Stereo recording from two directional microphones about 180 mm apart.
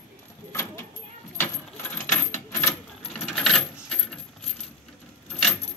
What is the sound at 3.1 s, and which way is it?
Coin, 5° left (ahead or behind).